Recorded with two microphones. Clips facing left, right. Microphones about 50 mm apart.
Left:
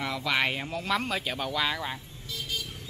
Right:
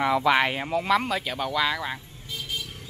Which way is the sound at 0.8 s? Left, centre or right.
Centre.